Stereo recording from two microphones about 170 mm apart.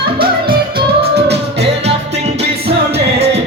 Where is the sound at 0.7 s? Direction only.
35° right (ahead or behind).